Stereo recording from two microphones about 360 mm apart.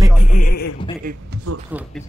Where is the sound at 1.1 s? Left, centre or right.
Right.